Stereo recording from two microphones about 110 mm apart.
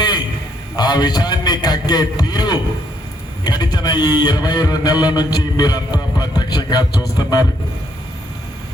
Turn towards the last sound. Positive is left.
turn(degrees=35)  # may be behind; listen again after turning